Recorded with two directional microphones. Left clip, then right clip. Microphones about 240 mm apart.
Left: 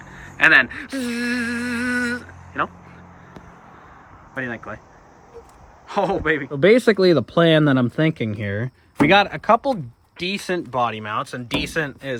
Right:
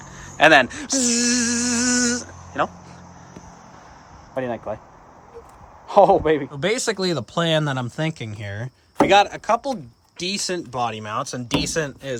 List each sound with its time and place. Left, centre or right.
0.0 s a sound: centre
0.3 s speech: centre
4.4 s speech: centre
5.9 s speech: centre
6.6 s speech: centre